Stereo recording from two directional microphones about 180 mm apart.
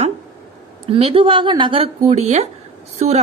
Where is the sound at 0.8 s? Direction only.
30° right (ahead or behind).